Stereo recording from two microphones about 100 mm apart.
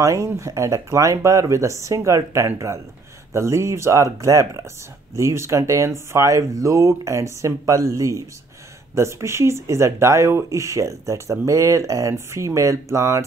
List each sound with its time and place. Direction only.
0.0 s speech: 30° right (ahead or behind)